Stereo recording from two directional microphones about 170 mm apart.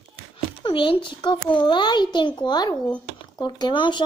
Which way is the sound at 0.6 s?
30° left (ahead or behind).